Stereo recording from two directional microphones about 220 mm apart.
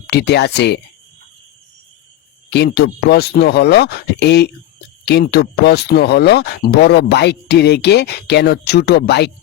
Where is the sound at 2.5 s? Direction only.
50° left (ahead or behind).